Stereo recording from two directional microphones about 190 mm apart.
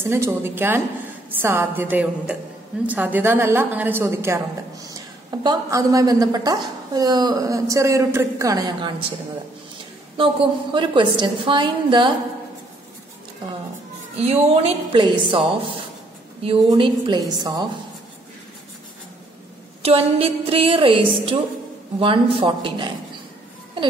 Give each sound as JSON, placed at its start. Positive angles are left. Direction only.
{"t": 0.0, "sound": "a woman's voice", "side_deg": -10}
{"t": 10.1, "sound": "a woman's voice", "side_deg": -25}
{"t": 14.1, "sound": "a woman's voice", "side_deg": -35}
{"t": 19.8, "sound": "a woman's voice", "side_deg": -30}